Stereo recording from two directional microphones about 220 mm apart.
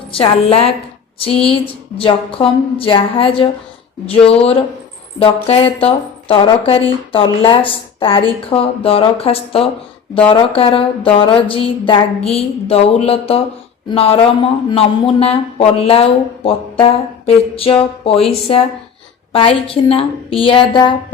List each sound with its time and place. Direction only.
0.1 s speech: 25° left (ahead or behind)